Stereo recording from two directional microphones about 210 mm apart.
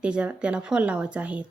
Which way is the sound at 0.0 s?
5° right (ahead or behind).